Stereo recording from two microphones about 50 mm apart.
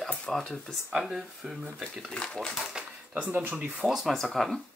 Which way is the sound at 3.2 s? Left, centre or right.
Right.